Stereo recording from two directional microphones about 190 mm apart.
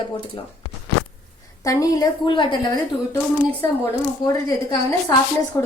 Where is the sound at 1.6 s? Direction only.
20° left (ahead or behind).